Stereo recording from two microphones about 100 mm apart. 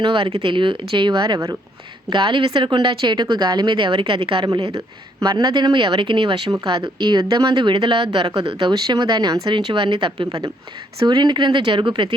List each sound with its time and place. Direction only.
0.0 s speech: 60° right (ahead or behind)
5.2 s speech: 40° right (ahead or behind); by 10.4 s 60° right (ahead or behind)
11.0 s speech: 50° right (ahead or behind)